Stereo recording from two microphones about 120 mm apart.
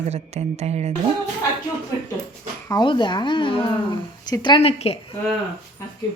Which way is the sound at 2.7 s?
40° left (ahead or behind).